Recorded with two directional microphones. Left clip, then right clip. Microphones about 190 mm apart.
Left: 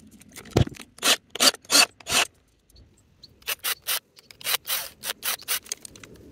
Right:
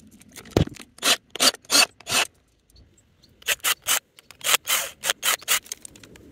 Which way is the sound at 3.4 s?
60° right (ahead or behind).